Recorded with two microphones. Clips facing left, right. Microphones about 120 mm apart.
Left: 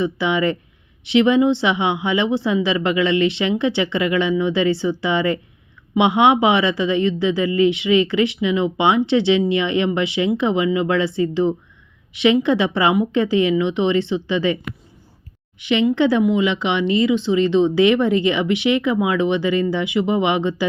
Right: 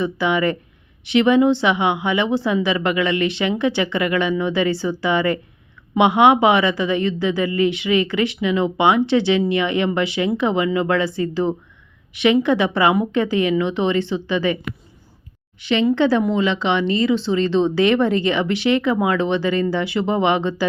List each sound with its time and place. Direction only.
0.0 s a woman's voice: 25° left (ahead or behind)